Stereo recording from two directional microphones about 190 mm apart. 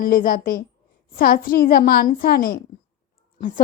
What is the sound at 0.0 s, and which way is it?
A woman's voice, 50° left (ahead or behind).